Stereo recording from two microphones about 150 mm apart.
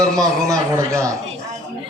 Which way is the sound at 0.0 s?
25° right (ahead or behind).